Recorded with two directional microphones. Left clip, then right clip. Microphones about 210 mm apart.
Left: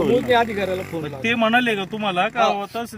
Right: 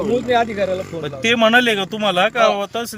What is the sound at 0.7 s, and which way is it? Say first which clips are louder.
Speech: right 3 dB; 30° left (ahead or behind).